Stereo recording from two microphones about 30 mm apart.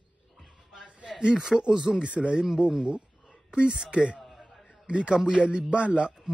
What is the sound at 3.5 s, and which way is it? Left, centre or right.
Speech, right.